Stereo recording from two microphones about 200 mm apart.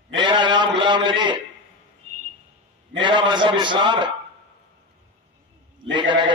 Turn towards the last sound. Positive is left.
turn(degrees=-25)  # may be behind; listen again after turning